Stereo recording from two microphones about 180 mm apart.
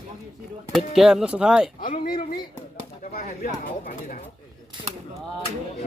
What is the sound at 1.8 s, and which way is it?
Speech, 50° left (ahead or behind).